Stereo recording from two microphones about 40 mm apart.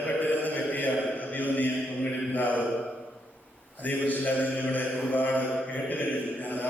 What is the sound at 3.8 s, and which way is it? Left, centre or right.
Mantra, left.